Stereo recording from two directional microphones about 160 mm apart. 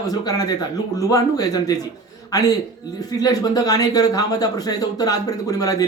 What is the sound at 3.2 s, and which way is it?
Speech, 25° left (ahead or behind).